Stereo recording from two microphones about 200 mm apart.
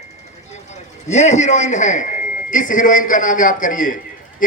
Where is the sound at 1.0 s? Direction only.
35° left (ahead or behind).